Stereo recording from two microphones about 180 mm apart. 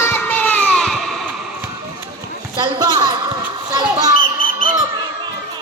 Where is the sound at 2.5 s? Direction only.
20° right (ahead or behind).